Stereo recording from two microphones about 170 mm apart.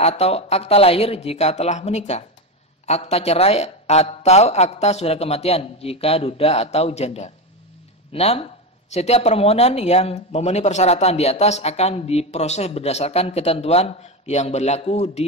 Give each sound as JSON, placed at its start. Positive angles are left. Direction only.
{"t": 0.0, "sound": "speech", "side_deg": 40}